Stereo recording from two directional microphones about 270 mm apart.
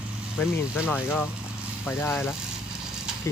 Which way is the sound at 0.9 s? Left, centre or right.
Centre.